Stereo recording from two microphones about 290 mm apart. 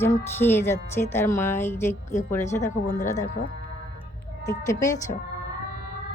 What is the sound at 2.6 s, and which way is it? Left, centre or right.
Speech, left.